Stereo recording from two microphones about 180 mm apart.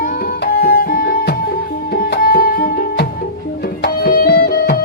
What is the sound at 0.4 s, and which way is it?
Music, 55° left (ahead or behind).